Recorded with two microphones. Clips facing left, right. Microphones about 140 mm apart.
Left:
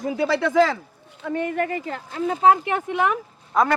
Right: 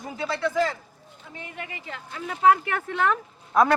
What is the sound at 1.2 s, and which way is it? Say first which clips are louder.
Speech: left 15 dB; 60° left (ahead or behind).